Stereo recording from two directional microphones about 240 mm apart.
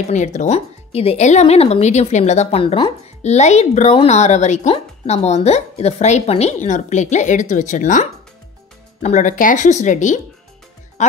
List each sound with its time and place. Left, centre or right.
0.1 s speech: left